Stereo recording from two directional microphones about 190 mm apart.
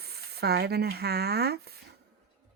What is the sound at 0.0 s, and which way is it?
Speech, 55° right (ahead or behind).